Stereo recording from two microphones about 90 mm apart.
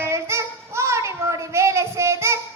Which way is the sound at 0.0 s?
30° right (ahead or behind).